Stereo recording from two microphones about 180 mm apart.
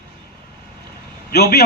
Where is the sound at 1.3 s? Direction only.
65° left (ahead or behind).